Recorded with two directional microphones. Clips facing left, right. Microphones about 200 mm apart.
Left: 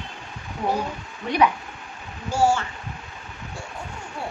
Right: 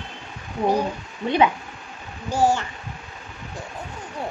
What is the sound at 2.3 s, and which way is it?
Speech, 15° right (ahead or behind).